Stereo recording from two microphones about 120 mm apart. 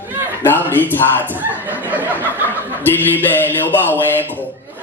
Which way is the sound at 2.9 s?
15° left (ahead or behind).